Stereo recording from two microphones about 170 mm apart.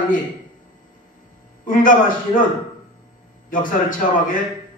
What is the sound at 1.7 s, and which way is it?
Speech, 55° left (ahead or behind).